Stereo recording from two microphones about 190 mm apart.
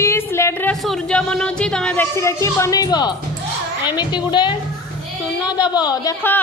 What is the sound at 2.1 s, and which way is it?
Speech, 15° left (ahead or behind).